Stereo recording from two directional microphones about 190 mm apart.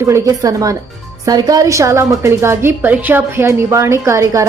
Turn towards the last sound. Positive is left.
turn(degrees=-15)  # may be behind; listen again after turning